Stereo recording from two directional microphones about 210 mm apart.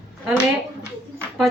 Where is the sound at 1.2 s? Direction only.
Centre (ahead or behind).